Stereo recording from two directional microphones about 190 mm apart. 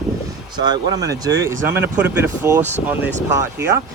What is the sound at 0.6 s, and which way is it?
Speech, 20° right (ahead or behind).